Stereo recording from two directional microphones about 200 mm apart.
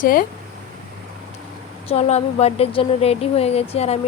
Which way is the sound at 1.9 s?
35° left (ahead or behind).